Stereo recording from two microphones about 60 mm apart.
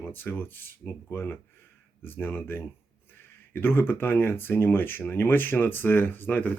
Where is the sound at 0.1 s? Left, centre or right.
Left.